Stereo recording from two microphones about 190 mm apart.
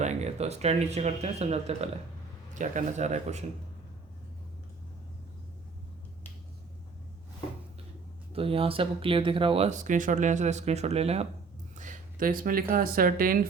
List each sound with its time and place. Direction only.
0.0 s speech: 35° right (ahead or behind)
8.3 s speech: 30° right (ahead or behind); by 13.5 s 50° right (ahead or behind)